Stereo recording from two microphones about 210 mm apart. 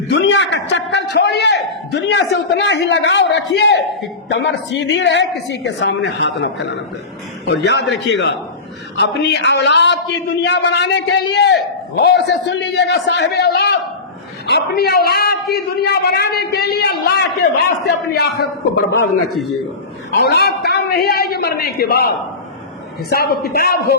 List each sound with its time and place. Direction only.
0.1 s a man's voice: 55° left (ahead or behind)
20.1 s a man's voice: 50° left (ahead or behind)
23.0 s a man's voice: 45° left (ahead or behind)